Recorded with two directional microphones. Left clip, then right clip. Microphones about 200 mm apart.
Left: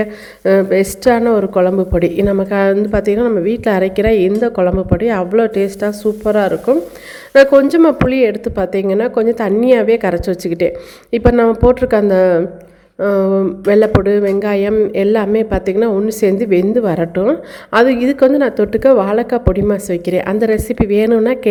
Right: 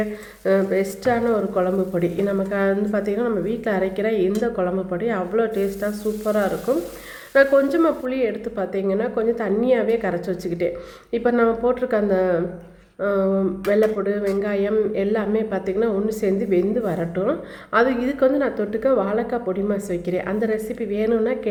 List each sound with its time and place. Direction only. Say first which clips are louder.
0.0 s speech: left 8 dB; 45° left (ahead or behind)